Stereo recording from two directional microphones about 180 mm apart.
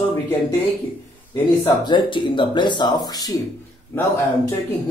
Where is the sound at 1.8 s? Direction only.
25° left (ahead or behind).